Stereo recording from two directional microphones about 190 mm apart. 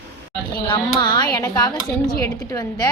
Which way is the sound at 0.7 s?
25° left (ahead or behind).